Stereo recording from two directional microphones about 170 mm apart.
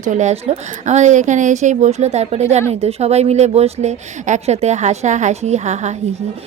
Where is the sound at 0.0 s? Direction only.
45° right (ahead or behind).